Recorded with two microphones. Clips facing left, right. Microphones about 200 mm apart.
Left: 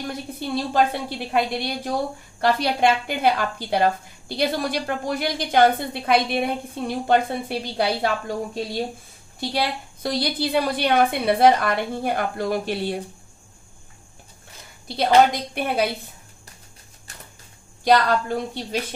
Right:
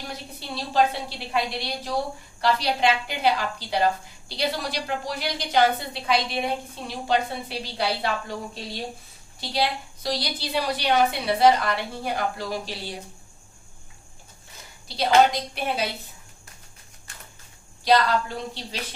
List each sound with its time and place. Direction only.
0.0 s a woman's voice: 50° left (ahead or behind)
9.4 s a woman's voice: 55° left (ahead or behind)
14.9 s a woman's voice: 55° left (ahead or behind)
17.8 s a woman's voice: 50° left (ahead or behind)